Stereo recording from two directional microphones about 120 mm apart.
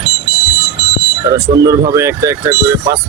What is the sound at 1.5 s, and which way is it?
Speech, 30° right (ahead or behind).